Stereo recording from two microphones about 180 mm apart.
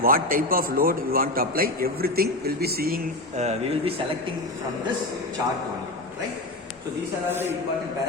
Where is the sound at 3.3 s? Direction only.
35° right (ahead or behind).